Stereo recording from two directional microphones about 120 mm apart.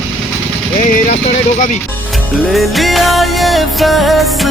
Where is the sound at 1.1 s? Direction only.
90° left.